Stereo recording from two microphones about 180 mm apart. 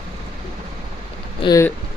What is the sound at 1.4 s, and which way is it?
Speech, 20° left (ahead or behind).